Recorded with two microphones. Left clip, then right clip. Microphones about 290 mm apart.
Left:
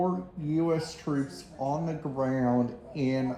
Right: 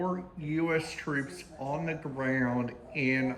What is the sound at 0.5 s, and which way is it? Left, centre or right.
A woman's voice, centre.